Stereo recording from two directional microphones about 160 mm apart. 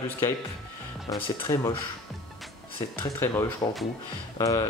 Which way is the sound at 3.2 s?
20° left (ahead or behind).